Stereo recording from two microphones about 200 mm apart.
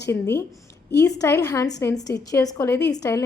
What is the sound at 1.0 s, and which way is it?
A woman's voice, 15° left (ahead or behind).